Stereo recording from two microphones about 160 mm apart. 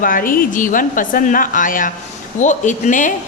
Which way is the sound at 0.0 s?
60° left (ahead or behind).